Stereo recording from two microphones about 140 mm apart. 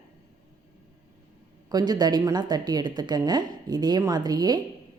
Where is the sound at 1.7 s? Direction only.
30° right (ahead or behind).